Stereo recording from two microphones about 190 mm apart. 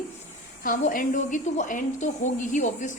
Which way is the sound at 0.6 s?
45° left (ahead or behind).